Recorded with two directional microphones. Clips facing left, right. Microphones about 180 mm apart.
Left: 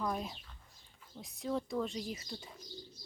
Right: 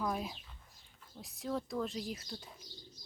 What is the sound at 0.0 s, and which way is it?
Speech, 5° right (ahead or behind).